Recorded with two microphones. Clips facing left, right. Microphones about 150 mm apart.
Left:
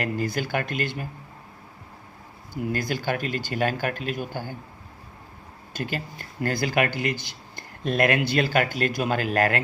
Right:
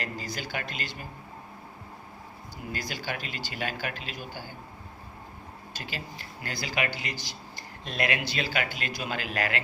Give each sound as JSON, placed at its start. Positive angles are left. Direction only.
{"t": 0.0, "sound": "speech", "side_deg": 55}
{"t": 2.7, "sound": "speech", "side_deg": 50}
{"t": 5.7, "sound": "speech", "side_deg": 50}